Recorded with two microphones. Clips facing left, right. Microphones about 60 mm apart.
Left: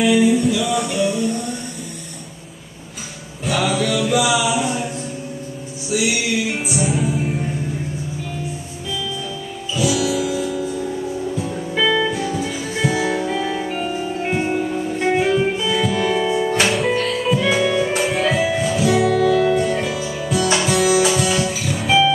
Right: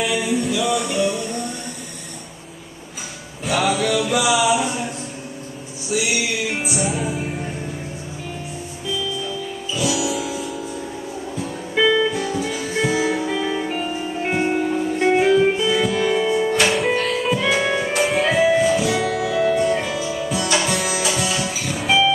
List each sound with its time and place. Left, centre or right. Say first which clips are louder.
0.0 s music: left 6 dB; centre
3.4 s music: even; centre
4.5 s a sound: right 1 dB; centre
5.9 s music: left 2 dB; centre
9.8 s music: left 3 dB; centre
11.7 s music: right 1 dB; centre
12.0 s music: even; centre
17.5 s music: left 2 dB; centre
17.9 s music: even; centre
19.9 s music: left 1 dB; centre